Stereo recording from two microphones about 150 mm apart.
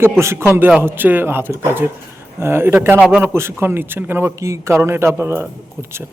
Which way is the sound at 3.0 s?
5° right (ahead or behind).